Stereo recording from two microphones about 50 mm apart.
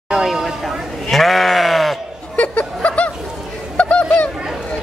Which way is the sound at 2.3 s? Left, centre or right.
Left.